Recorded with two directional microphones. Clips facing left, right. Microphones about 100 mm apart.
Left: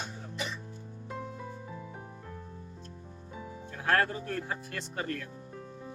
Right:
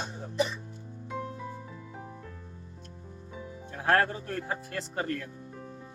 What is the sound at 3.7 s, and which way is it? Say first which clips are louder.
Speech: right 3 dB; 30° right (ahead or behind).